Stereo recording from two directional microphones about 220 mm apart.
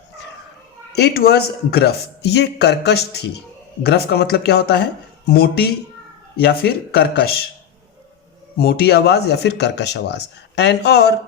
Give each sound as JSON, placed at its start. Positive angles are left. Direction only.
{"t": 0.9, "sound": "speech", "side_deg": 45}
{"t": 8.5, "sound": "speech", "side_deg": 45}